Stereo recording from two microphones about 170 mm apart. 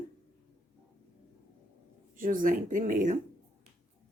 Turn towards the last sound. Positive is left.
turn(degrees=-50)  # may be behind; listen again after turning